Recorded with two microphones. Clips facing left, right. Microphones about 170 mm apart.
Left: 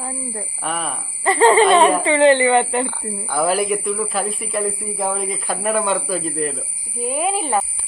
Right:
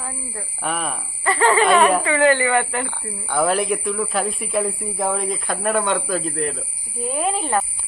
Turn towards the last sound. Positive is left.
turn(degrees=10)  # may be behind; listen again after turning